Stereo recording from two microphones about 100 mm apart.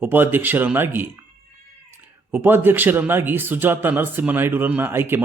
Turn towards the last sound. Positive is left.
turn(degrees=-20)  # may be behind; listen again after turning